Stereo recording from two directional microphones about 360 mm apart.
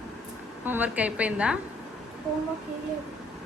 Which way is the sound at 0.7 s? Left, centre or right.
Centre.